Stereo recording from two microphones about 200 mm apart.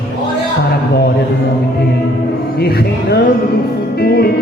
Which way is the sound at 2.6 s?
50° left (ahead or behind).